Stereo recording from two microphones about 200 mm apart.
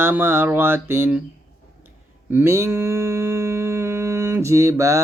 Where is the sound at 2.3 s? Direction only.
10° right (ahead or behind).